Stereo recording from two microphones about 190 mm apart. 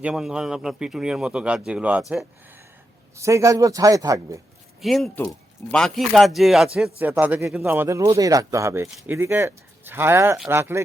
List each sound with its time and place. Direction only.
0.0 s a man's voice: 5° right (ahead or behind)
3.2 s speech: 15° right (ahead or behind)
4.8 s a man's voice: centre (ahead or behind)
10.6 s speech: 15° right (ahead or behind)